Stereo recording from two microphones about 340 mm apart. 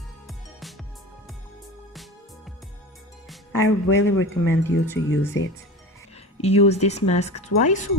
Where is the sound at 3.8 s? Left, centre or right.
Left.